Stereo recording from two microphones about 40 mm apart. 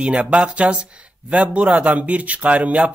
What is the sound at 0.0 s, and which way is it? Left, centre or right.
A man's voice, right.